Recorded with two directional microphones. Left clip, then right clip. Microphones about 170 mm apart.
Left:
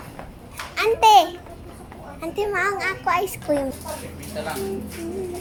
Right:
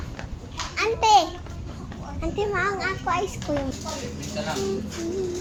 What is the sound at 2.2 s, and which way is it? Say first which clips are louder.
A child's voice: left 2 dB; 15° left (ahead or behind).